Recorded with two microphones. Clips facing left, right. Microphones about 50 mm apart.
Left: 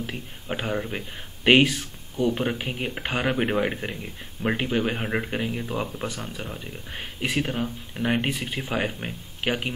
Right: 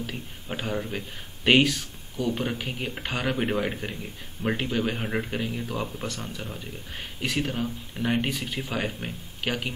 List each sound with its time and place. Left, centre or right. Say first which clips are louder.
0.0 s speech: left 1 dB; centre